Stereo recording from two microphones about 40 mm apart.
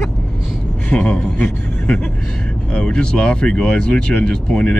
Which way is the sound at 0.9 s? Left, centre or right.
Left.